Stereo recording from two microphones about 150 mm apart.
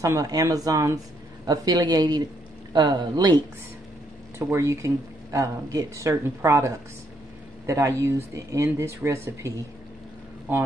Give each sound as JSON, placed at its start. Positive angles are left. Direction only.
{"t": 0.0, "sound": "speech", "side_deg": -20}
{"t": 4.4, "sound": "speech", "side_deg": -20}